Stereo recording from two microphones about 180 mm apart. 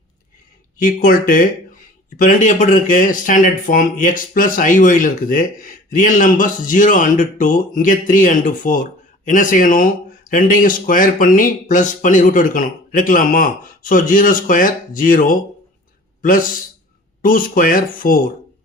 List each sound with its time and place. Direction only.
0.8 s a man's voice: 50° left (ahead or behind)